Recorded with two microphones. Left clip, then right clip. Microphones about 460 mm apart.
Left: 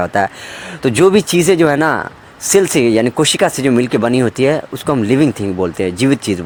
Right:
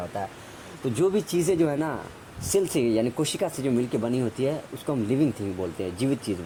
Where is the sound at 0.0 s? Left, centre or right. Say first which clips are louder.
Left 17 dB; right.